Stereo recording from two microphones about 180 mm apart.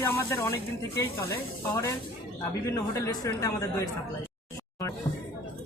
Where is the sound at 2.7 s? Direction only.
20° left (ahead or behind).